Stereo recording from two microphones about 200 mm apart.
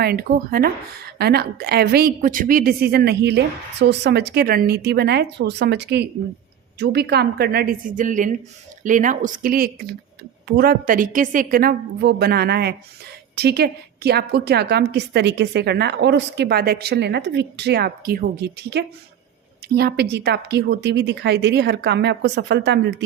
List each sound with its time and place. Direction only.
0.0 s a woman's voice: 50° right (ahead or behind)